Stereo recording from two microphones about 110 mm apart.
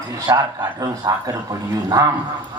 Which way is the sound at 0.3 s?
40° right (ahead or behind).